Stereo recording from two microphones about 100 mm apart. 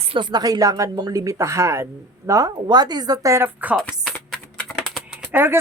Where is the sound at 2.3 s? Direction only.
40° right (ahead or behind).